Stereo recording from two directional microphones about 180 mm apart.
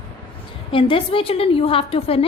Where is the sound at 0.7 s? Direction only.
30° left (ahead or behind).